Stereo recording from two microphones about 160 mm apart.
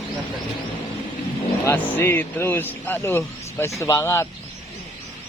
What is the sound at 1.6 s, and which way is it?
Speech, 10° left (ahead or behind).